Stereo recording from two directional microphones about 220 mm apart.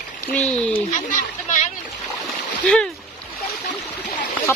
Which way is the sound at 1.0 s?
35° left (ahead or behind).